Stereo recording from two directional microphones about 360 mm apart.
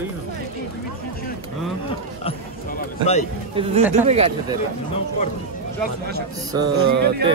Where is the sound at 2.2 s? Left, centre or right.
Centre.